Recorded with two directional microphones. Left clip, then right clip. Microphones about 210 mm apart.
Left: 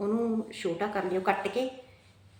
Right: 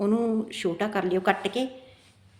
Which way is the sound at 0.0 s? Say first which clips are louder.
Right 4 dB; 55° right (ahead or behind).